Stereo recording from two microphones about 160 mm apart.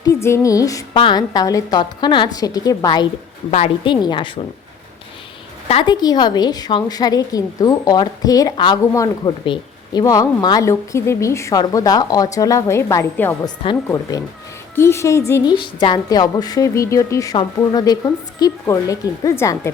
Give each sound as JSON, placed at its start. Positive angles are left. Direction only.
{"t": 0.0, "sound": "a woman's voice", "side_deg": 15}
{"t": 3.5, "sound": "a woman's voice", "side_deg": 40}
{"t": 4.0, "sound": "a woman's voice", "side_deg": 30}
{"t": 5.8, "sound": "a woman's voice", "side_deg": 25}